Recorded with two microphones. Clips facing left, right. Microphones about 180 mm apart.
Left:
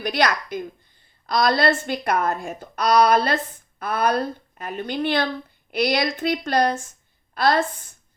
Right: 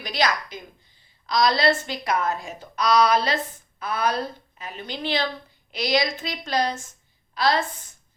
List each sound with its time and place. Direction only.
0.0 s a woman's voice: 60° left (ahead or behind)